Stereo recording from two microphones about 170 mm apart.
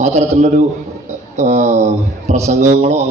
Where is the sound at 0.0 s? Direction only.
45° right (ahead or behind).